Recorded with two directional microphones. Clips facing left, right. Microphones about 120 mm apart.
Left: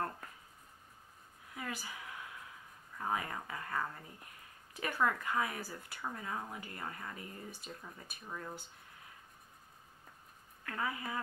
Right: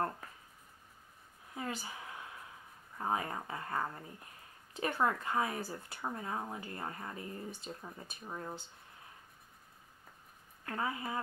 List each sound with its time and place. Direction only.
1.5 s a sound: 30° right (ahead or behind)
3.0 s speech: 30° right (ahead or behind)
10.6 s speech: 30° right (ahead or behind)